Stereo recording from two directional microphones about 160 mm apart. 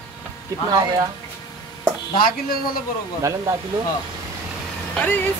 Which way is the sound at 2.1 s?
65° left (ahead or behind).